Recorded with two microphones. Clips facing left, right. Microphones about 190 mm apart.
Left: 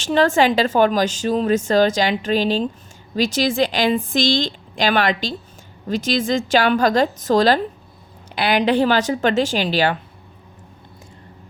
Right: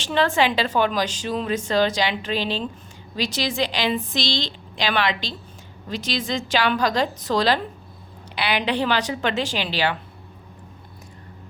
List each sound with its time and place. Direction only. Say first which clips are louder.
0.0 s a woman's voice: left 5 dB; 45° left (ahead or behind)